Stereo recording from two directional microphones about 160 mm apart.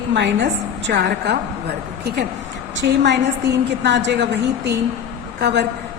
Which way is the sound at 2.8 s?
90° right.